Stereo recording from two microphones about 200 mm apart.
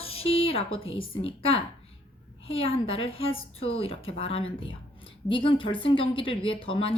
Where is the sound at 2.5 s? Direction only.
30° left (ahead or behind).